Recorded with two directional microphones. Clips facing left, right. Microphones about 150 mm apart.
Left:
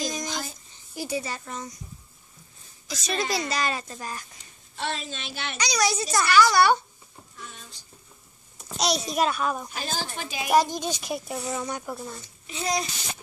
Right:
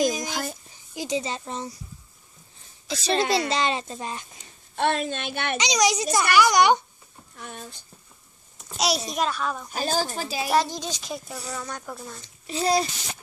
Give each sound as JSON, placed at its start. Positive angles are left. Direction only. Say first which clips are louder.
{"t": 0.2, "sound": "a sound", "louder": "right 3 dB", "side_deg": -55}
{"t": 0.9, "sound": "a woman's voice", "louder": "right 3 dB", "side_deg": -20}
{"t": 2.9, "sound": "a woman's voice", "louder": "right 5 dB", "side_deg": -30}
{"t": 4.7, "sound": "speech", "louder": "right 8 dB", "side_deg": -55}
{"t": 5.6, "sound": "a woman's voice", "louder": "right 2 dB", "side_deg": -20}
{"t": 7.3, "sound": "a sound", "louder": "right 6 dB", "side_deg": -55}
{"t": 8.5, "sound": "a child's voice", "louder": "right 1 dB", "side_deg": 0}
{"t": 9.7, "sound": "speech", "louder": "right 6 dB", "side_deg": -40}
{"t": 10.7, "sound": "speech", "louder": "left 3 dB", "side_deg": 55}
{"t": 11.0, "sound": "speech", "louder": "left 3 dB", "side_deg": 15}
{"t": 12.4, "sound": "speech", "louder": "right 6 dB", "side_deg": -35}